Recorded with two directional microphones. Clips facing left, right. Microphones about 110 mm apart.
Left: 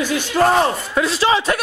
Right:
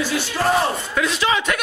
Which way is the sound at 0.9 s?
35° left (ahead or behind).